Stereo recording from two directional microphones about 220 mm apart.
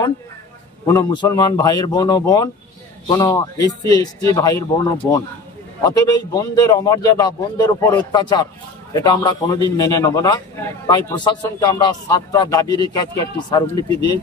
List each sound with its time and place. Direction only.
0.8 s a man's voice: 15° left (ahead or behind)